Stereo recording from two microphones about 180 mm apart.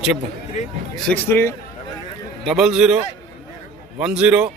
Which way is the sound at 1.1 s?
10° left (ahead or behind).